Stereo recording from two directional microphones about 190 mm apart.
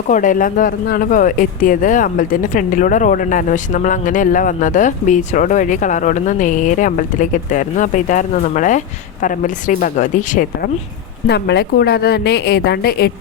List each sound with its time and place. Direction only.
0.1 s speech: 45° left (ahead or behind)
11.3 s a woman's voice: 60° left (ahead or behind)